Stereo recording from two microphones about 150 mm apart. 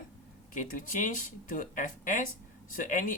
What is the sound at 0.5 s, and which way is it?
Speech, 60° left (ahead or behind).